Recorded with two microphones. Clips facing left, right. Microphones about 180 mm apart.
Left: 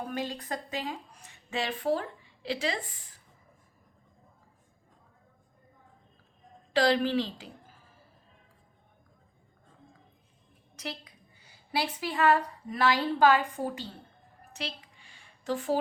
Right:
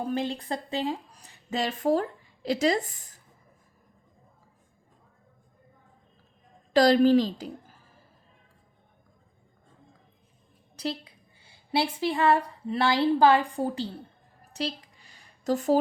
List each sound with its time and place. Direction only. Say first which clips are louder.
0.0 s speech: right 5 dB; 30° right (ahead or behind)
6.7 s a woman's voice: right 7 dB; 40° right (ahead or behind)
10.8 s a woman's voice: right 7 dB; 30° right (ahead or behind)
14.5 s a sound: right 7 dB; 40° right (ahead or behind)